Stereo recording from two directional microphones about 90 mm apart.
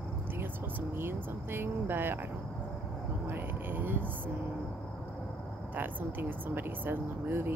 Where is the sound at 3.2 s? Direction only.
25° right (ahead or behind).